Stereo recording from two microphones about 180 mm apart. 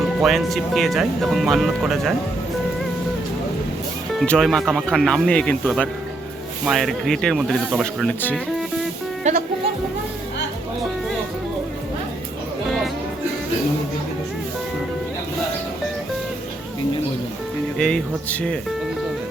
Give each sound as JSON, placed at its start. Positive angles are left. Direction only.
{"t": 0.2, "sound": "speech", "side_deg": 0}
{"t": 4.2, "sound": "speech", "side_deg": 0}
{"t": 8.2, "sound": "speech", "side_deg": 10}
{"t": 9.2, "sound": "music", "side_deg": -40}
{"t": 17.7, "sound": "speech", "side_deg": 5}